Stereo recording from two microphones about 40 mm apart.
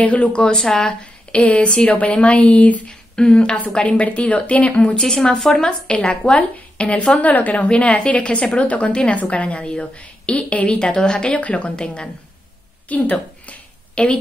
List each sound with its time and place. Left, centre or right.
0.0 s a woman's voice: left
0.3 s speech: left
1.3 s a woman's voice: left
2.9 s a sound: left
3.9 s a woman's voice: left
5.0 s a woman's voice: centre; by 7.2 s left
7.2 s a woman's voice: left
7.5 s a woman's voice: left
10.8 s speech: left
11.4 s a woman's voice: left
11.7 s speech: left
12.8 s a sound: left
14.0 s speech: left